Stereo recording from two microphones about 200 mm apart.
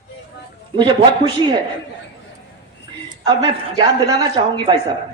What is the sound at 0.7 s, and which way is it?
Speech, 25° right (ahead or behind).